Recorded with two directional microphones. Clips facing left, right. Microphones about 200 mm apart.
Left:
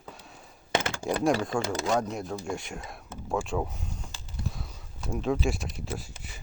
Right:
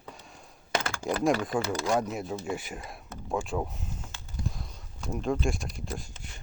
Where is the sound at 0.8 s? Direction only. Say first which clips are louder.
Left 1 dB; 20° left (ahead or behind).